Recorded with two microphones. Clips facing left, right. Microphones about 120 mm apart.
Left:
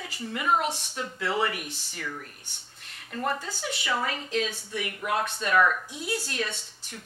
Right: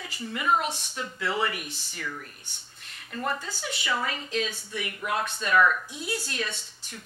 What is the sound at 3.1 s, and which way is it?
A woman's voice, 35° left (ahead or behind).